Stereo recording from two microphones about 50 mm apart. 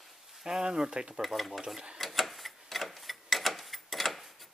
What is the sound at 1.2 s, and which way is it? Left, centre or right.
Speech, centre.